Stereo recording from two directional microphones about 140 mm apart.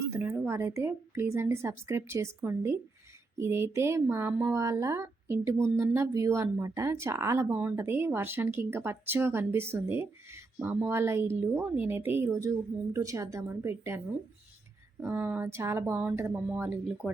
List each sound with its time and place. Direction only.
0.1 s speech: 15° right (ahead or behind)
15.0 s speech: 15° right (ahead or behind)